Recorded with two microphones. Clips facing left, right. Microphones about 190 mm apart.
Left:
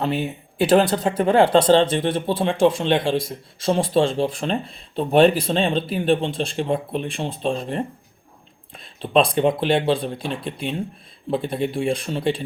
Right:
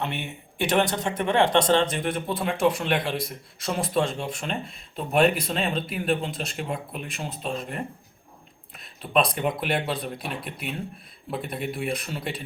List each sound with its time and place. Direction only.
0.0 s a man's voice: 35° left (ahead or behind)